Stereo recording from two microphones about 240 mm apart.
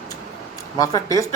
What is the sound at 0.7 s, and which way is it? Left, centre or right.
Speech, centre.